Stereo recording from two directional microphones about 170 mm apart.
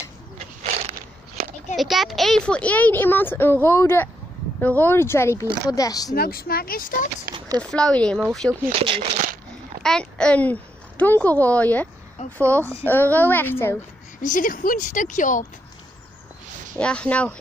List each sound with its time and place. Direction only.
1.8 s speech: centre (ahead or behind); by 6.1 s 20° left (ahead or behind)
6.1 s speech: 60° left (ahead or behind)
7.3 s a sound: 25° right (ahead or behind)
7.7 s speech: 5° left (ahead or behind)
8.7 s speech: 35° right (ahead or behind)
9.8 s a child's voice: 5° left (ahead or behind)
14.2 s speech: 50° left (ahead or behind)
16.7 s speech: 5° left (ahead or behind)